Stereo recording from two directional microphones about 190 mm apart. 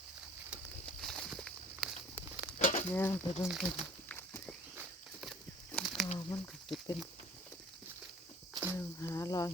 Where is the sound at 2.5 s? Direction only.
45° left (ahead or behind).